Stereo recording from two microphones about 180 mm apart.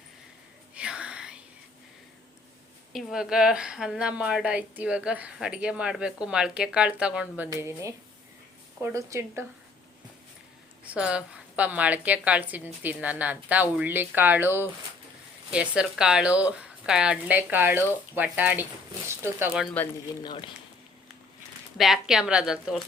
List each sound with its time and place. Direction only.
0.7 s whispering: 5° right (ahead or behind)
2.9 s a woman's voice: centre (ahead or behind)
10.8 s a woman's voice: 5° right (ahead or behind)
19.8 s speech: 10° left (ahead or behind)
20.2 s speech: 25° left (ahead or behind)
21.8 s a woman's voice: centre (ahead or behind)